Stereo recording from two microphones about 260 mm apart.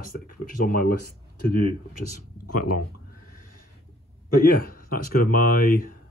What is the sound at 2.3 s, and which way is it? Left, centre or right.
Speech, left.